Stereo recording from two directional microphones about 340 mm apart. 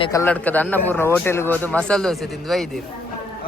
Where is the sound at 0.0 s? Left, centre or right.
Centre.